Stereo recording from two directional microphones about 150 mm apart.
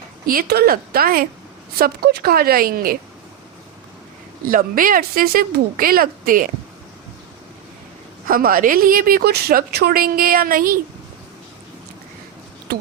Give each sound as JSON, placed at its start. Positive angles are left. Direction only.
{"t": 0.3, "sound": "a woman's voice", "side_deg": -80}
{"t": 1.8, "sound": "a woman's voice", "side_deg": -90}
{"t": 4.4, "sound": "a woman's voice", "side_deg": -70}
{"t": 8.3, "sound": "a woman's voice", "side_deg": -70}
{"t": 12.7, "sound": "a sound", "side_deg": -90}